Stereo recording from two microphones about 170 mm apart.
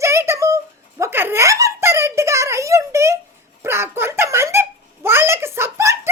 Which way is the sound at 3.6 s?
15° right (ahead or behind).